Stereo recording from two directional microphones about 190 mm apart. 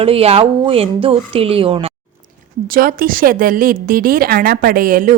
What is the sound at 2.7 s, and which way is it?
A woman's voice, 50° right (ahead or behind).